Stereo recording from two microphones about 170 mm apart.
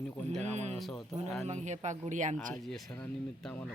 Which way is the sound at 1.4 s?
45° right (ahead or behind).